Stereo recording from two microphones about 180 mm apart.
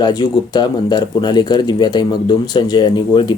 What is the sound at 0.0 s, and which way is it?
Speech, 25° left (ahead or behind).